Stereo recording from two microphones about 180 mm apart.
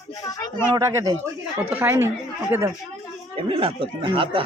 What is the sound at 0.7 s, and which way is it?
Speech, 15° right (ahead or behind).